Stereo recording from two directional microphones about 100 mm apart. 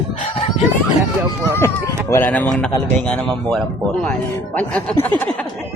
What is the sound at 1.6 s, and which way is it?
Speech, 25° left (ahead or behind).